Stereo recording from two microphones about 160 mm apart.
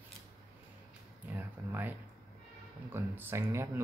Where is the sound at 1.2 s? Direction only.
10° right (ahead or behind).